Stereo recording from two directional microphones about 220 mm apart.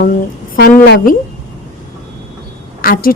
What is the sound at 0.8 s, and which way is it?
Speech, 50° left (ahead or behind).